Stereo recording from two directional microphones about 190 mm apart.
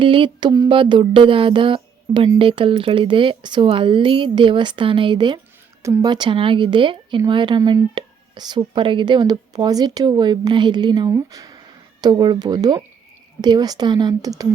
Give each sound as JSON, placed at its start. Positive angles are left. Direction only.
{"t": 0.0, "sound": "speech", "side_deg": -25}